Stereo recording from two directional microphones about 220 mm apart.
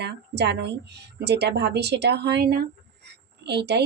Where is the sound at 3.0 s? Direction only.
50° right (ahead or behind).